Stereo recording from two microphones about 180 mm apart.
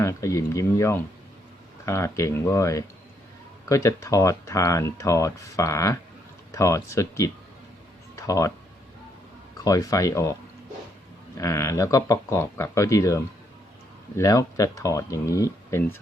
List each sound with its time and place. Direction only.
0.0 s speech: 15° left (ahead or behind)
8.3 s speech: 15° left (ahead or behind)
9.6 s speech: 20° left (ahead or behind)
11.3 s speech: 15° left (ahead or behind)